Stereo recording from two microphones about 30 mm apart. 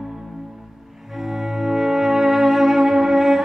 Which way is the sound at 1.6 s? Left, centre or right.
Centre.